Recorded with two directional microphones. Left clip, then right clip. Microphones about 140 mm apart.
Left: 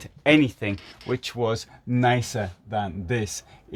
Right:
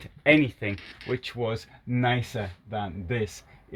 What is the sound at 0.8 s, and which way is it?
Speech, 50° left (ahead or behind).